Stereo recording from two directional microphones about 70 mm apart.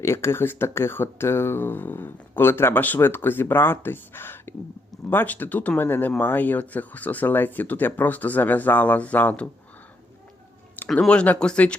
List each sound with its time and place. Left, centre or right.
0.0 s speech: left
10.8 s a sound: left
11.1 s speech: centre